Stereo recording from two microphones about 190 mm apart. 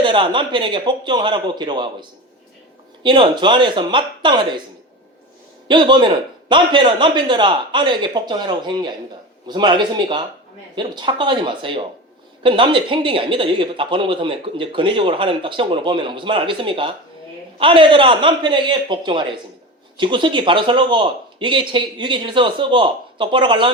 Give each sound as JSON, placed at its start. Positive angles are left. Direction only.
{"t": 0.0, "sound": "speech", "side_deg": -25}
{"t": 5.6, "sound": "speech", "side_deg": -25}